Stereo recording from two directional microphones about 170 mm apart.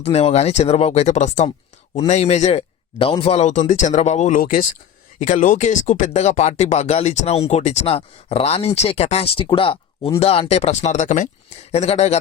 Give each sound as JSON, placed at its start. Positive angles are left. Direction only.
{"t": 0.0, "sound": "speech", "side_deg": 40}